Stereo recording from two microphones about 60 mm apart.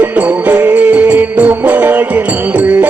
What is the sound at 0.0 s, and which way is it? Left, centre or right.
Music, right.